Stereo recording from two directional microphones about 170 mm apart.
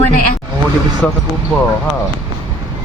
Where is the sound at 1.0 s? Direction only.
5° left (ahead or behind).